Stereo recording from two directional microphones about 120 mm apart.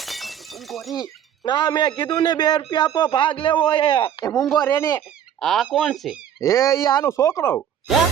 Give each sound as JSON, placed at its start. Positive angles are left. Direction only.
{"t": 0.0, "sound": "shatter", "side_deg": 0}
{"t": 1.0, "sound": "speech", "side_deg": 35}
{"t": 4.5, "sound": "speech", "side_deg": 30}
{"t": 5.4, "sound": "speech", "side_deg": 5}
{"t": 5.7, "sound": "fowl", "side_deg": 0}
{"t": 6.4, "sound": "speech", "side_deg": 25}